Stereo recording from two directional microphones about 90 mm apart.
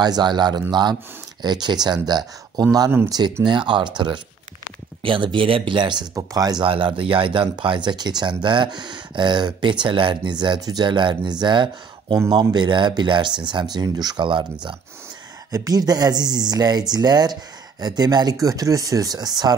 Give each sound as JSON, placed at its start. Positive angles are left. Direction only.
{"t": 0.0, "sound": "speech", "side_deg": -50}
{"t": 3.4, "sound": "speech", "side_deg": -65}
{"t": 5.0, "sound": "speech", "side_deg": -70}
{"t": 6.1, "sound": "speech", "side_deg": -45}
{"t": 6.6, "sound": "speech", "side_deg": -75}
{"t": 15.5, "sound": "speech", "side_deg": -45}